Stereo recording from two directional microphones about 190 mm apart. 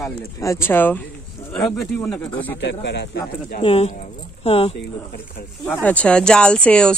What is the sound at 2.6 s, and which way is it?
Speech, 65° left (ahead or behind).